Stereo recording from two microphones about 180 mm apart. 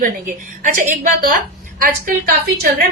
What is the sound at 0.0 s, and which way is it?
Speech, 45° right (ahead or behind).